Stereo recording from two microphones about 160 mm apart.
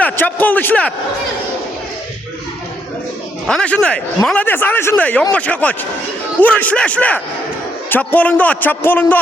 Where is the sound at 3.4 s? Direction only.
5° left (ahead or behind).